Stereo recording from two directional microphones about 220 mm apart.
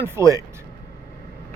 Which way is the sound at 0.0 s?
15° right (ahead or behind).